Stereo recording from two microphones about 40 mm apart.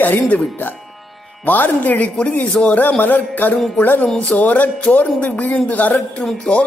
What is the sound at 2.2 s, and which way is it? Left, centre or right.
Speech, left.